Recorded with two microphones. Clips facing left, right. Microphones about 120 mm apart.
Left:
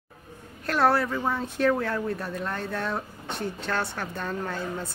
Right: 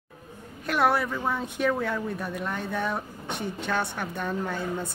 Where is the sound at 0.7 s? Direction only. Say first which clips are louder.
Left 1 dB; centre (ahead or behind).